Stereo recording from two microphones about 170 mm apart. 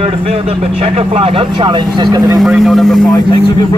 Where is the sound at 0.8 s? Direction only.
35° right (ahead or behind).